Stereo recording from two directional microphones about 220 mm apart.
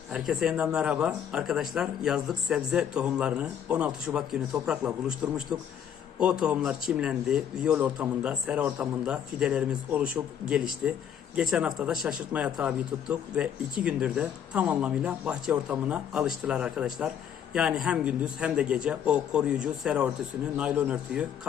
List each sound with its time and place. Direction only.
0.1 s speech: centre (ahead or behind)